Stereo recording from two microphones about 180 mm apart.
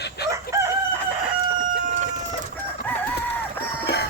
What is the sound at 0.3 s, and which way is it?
Crowing, 15° right (ahead or behind).